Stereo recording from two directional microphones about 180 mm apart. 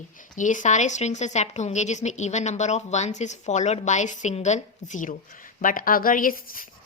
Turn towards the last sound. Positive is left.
turn(degrees=50)  # may be behind; listen again after turning